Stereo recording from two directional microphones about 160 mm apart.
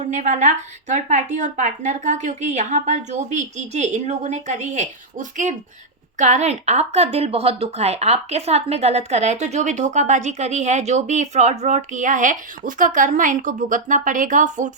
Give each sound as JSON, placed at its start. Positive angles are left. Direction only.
{"t": 0.1, "sound": "speech", "side_deg": -50}